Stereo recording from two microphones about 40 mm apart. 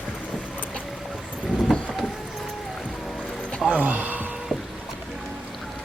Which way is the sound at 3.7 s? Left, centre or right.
Right.